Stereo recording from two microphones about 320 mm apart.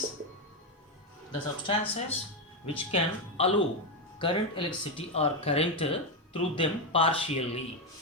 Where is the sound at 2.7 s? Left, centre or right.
Centre.